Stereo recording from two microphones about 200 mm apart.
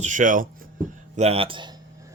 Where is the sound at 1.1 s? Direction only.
30° right (ahead or behind).